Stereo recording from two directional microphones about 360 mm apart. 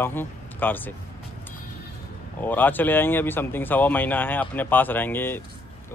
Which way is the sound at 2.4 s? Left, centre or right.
Centre.